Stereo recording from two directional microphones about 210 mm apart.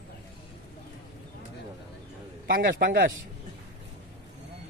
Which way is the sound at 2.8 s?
45° right (ahead or behind).